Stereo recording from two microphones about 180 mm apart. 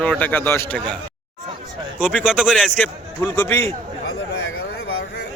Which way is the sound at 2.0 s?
5° right (ahead or behind).